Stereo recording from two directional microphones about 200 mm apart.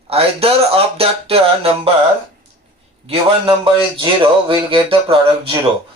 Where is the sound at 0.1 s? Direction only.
30° right (ahead or behind).